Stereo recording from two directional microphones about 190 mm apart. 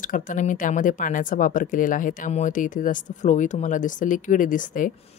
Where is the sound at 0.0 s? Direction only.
45° left (ahead or behind).